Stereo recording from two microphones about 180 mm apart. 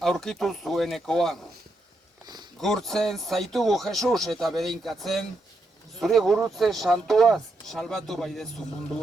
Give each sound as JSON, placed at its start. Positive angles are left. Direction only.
{"t": 0.0, "sound": "speech", "side_deg": 5}
{"t": 2.2, "sound": "a sound", "side_deg": -25}
{"t": 2.6, "sound": "speech", "side_deg": 0}